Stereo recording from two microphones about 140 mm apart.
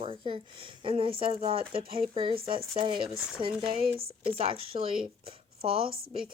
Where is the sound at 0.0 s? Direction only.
40° right (ahead or behind).